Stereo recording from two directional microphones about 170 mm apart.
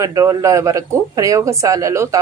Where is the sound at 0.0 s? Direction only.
20° right (ahead or behind).